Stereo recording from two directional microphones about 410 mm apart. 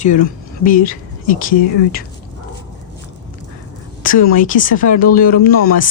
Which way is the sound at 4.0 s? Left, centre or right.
Centre.